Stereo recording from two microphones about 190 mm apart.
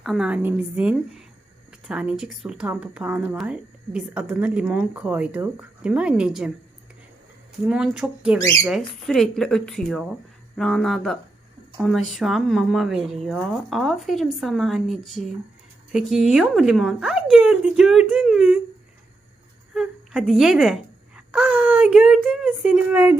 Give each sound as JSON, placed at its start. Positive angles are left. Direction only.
{"t": 0.0, "sound": "speech", "side_deg": 0}
{"t": 7.6, "sound": "speech", "side_deg": -5}
{"t": 19.7, "sound": "speech", "side_deg": 0}